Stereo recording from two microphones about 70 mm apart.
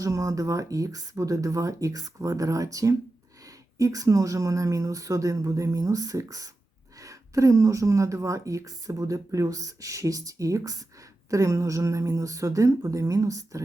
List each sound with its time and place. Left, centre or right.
0.0 s a woman's voice: right